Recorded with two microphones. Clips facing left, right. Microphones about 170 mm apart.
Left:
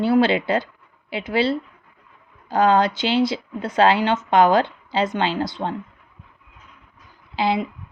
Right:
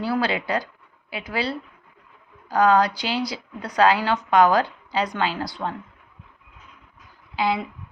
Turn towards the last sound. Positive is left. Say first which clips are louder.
# left 2 dB
turn(degrees=25)  # may be behind; listen again after turning